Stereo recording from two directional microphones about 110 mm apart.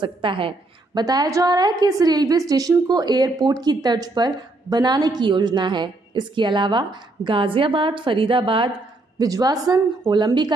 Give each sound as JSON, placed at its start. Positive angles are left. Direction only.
{"t": 0.0, "sound": "a woman's voice", "side_deg": -50}
{"t": 1.0, "sound": "a woman's voice", "side_deg": -35}
{"t": 9.2, "sound": "a woman's voice", "side_deg": -35}
{"t": 10.0, "sound": "a woman's voice", "side_deg": -45}